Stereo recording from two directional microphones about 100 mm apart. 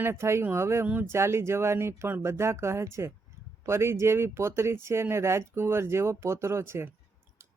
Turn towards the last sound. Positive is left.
turn(degrees=-25)  # may be behind; listen again after turning